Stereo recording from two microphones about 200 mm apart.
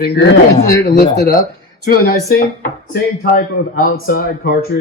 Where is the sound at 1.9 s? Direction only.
45° left (ahead or behind).